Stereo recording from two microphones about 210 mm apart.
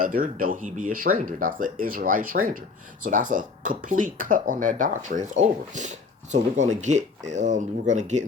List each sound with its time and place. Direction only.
0.0 s speech: 40° right (ahead or behind)